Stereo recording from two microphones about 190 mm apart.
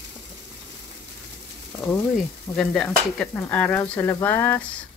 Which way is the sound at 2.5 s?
5° left (ahead or behind).